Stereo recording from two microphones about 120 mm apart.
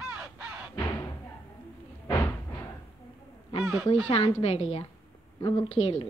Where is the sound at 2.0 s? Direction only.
20° left (ahead or behind).